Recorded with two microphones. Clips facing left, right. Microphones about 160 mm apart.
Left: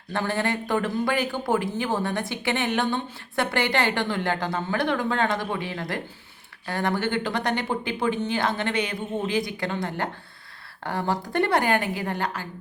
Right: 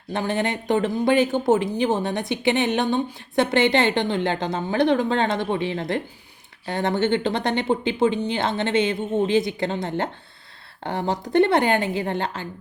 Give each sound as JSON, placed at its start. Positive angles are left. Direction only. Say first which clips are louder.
{"t": 0.1, "sound": "a woman's voice", "louder": "right 2 dB", "side_deg": -20}